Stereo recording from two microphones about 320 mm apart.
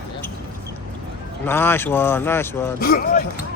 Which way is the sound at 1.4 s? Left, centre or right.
Centre.